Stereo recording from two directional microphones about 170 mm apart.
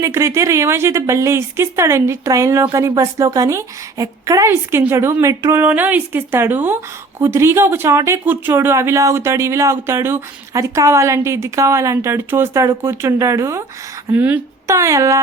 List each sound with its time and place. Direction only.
0.0 s speech: 15° right (ahead or behind)